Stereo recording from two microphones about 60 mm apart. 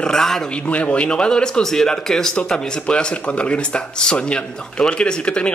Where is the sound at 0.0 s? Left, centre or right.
Centre.